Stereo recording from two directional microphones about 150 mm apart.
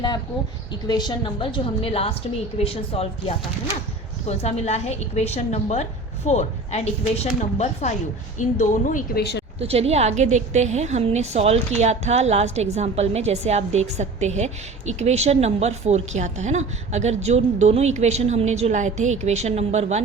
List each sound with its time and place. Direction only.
0.7 s a woman's voice: 30° left (ahead or behind); by 9.4 s 90° left
9.6 s a woman's voice: 45° right (ahead or behind)